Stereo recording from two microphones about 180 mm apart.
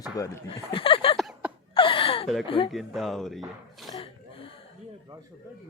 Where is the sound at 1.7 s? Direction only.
30° left (ahead or behind).